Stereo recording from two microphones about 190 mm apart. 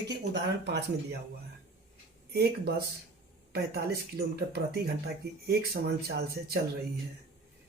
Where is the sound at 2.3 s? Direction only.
60° right (ahead or behind).